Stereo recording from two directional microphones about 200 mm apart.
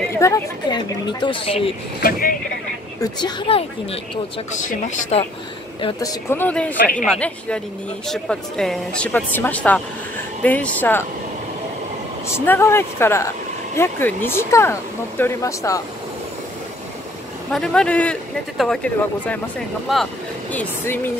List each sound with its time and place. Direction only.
0.1 s a woman's voice: 15° left (ahead or behind)
2.0 s speech: 45° left (ahead or behind)
3.0 s a woman's voice: 20° left (ahead or behind); by 5.2 s 40° left (ahead or behind)
5.8 s a woman's voice: 25° left (ahead or behind)
6.3 s speech: 10° left (ahead or behind)
12.4 s speech: 10° left (ahead or behind)
17.5 s speech: 5° left (ahead or behind)
20.5 s speech: 10° left (ahead or behind)